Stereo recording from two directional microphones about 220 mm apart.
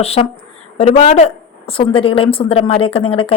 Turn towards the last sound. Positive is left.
turn(degrees=25)  # may be behind; listen again after turning